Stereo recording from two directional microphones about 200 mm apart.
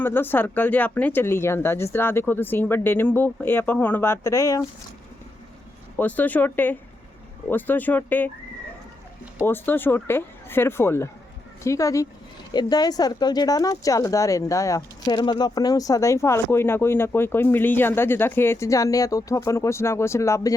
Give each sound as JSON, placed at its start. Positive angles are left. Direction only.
{"t": 0.0, "sound": "speech", "side_deg": 10}
{"t": 6.0, "sound": "speech", "side_deg": 10}
{"t": 9.5, "sound": "speech", "side_deg": 10}